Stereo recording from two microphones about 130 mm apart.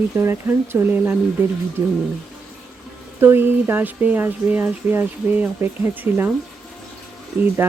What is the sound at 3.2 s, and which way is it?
Speech, 15° right (ahead or behind).